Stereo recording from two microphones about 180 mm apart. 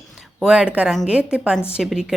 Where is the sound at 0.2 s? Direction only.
5° right (ahead or behind).